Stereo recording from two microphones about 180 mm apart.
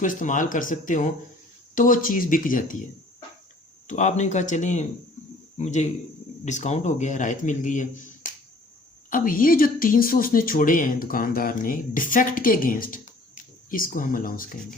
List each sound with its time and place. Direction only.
0.0 s a woman's voice: 45° left (ahead or behind)
3.8 s a man's voice: 40° left (ahead or behind)